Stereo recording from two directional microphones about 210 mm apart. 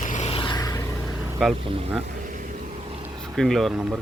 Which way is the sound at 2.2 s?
40° right (ahead or behind).